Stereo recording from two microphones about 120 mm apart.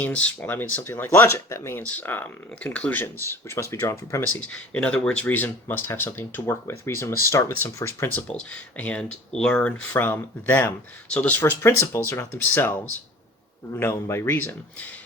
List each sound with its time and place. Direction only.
0.0 s speech: 10° left (ahead or behind)
4.3 s speech: 10° left (ahead or behind)